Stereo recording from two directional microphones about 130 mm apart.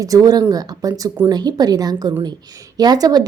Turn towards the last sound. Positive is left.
turn(degrees=-30)  # may be behind; listen again after turning